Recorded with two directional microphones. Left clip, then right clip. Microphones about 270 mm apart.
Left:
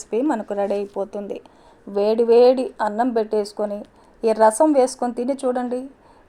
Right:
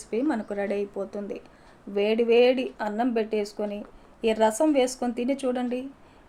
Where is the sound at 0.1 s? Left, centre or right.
Left.